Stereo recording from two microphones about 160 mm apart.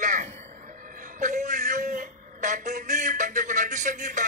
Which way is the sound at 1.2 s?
50° right (ahead or behind).